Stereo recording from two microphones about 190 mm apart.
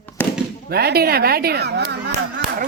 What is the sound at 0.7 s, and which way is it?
Speech, 55° right (ahead or behind).